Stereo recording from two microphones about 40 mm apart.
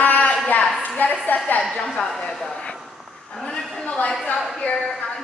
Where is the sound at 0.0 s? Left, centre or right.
Left.